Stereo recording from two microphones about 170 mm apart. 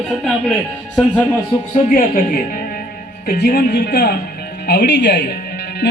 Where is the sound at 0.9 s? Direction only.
5° left (ahead or behind).